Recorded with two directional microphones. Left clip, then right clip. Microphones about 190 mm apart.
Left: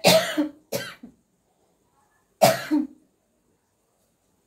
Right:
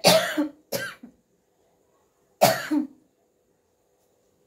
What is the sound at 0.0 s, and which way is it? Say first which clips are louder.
Cough: left 1 dB; 15° right (ahead or behind).